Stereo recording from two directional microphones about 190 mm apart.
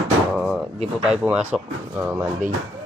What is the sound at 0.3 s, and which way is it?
Door, centre (ahead or behind).